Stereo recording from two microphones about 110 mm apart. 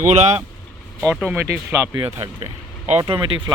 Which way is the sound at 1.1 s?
5° right (ahead or behind).